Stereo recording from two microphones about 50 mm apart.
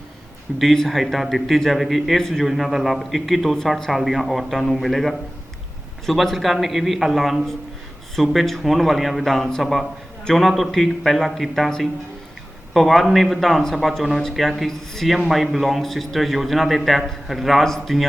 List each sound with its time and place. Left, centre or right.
0.6 s a man's voice: centre
2.1 s a man's voice: centre
2.4 s a man's voice: centre
12.7 s a man's voice: centre